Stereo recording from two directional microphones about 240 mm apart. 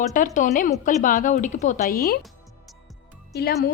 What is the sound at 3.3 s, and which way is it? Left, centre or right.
Speech, left.